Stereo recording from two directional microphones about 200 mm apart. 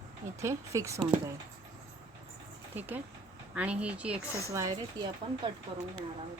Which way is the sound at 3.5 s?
5° right (ahead or behind).